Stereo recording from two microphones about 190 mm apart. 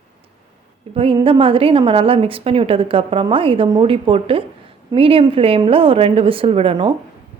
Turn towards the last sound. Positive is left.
turn(degrees=-30)  # may be behind; listen again after turning